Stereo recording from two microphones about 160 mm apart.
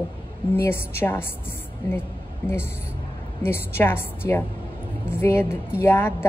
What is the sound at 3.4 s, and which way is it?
Speech, 15° left (ahead or behind).